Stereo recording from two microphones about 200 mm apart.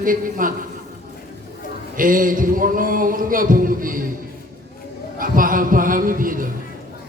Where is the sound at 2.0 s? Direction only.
40° right (ahead or behind).